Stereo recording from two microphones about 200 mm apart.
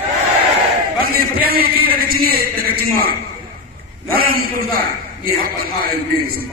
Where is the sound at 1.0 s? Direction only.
50° right (ahead or behind).